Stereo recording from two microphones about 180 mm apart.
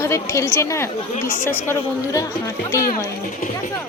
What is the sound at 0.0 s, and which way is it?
Speech, 15° left (ahead or behind).